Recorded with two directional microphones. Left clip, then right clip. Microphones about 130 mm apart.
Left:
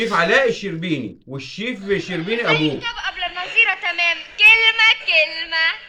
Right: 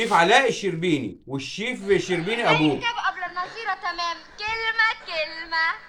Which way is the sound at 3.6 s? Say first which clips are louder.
Left 8 dB; 45° left (ahead or behind).